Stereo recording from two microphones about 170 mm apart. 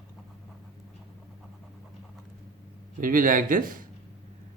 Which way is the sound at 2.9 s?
55° right (ahead or behind).